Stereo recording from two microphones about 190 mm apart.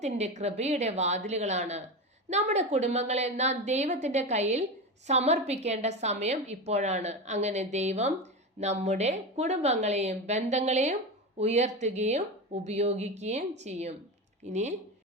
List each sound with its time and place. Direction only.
0.0 s a woman's voice: 35° right (ahead or behind)